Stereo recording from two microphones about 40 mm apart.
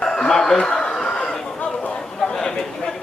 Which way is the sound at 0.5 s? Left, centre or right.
Left.